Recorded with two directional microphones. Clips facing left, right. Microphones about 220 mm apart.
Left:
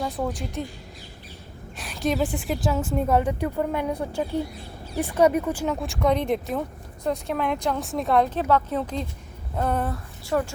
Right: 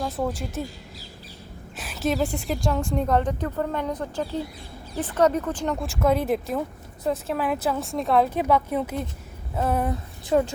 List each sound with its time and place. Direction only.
0.0 s speech: centre (ahead or behind)
1.7 s a sound: centre (ahead or behind)
2.5 s speech: 5° left (ahead or behind)
9.9 s a woman's voice: 20° right (ahead or behind)